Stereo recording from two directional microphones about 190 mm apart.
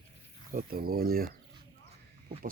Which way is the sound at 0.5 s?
50° right (ahead or behind).